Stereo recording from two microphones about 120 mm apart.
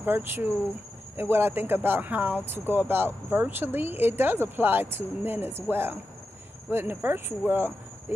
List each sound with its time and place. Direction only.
0.0 s speech: 20° right (ahead or behind)